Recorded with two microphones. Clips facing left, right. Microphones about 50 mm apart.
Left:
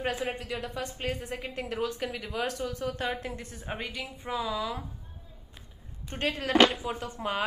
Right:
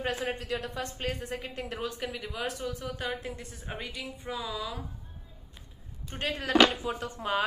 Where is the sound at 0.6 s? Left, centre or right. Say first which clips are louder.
Even; right.